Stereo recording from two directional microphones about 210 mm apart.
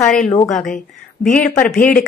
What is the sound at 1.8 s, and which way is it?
Speech, 40° left (ahead or behind).